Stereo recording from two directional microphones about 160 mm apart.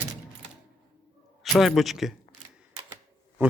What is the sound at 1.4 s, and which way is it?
Speech, centre (ahead or behind).